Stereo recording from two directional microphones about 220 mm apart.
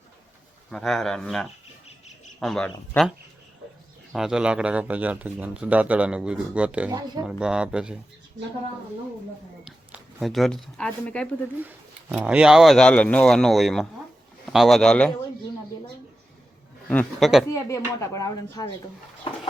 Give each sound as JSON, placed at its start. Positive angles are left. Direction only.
{"t": 0.7, "sound": "speech", "side_deg": 0}
{"t": 4.1, "sound": "speech", "side_deg": -5}
{"t": 6.9, "sound": "speech", "side_deg": -20}
{"t": 7.3, "sound": "speech", "side_deg": -5}
{"t": 9.6, "sound": "speech", "side_deg": 0}
{"t": 11.5, "sound": "speech", "side_deg": -10}
{"t": 16.9, "sound": "speech", "side_deg": 5}
{"t": 17.5, "sound": "speech", "side_deg": 15}